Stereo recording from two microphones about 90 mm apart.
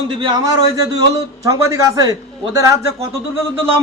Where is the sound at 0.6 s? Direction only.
40° right (ahead or behind).